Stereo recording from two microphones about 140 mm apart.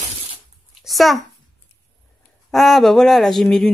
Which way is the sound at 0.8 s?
Centre (ahead or behind).